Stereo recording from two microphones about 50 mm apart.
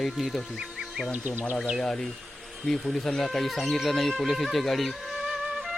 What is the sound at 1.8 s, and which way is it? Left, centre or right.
A man's voice, centre.